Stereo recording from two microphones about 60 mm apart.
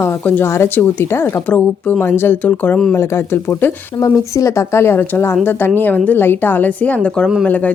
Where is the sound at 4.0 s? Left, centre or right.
Left.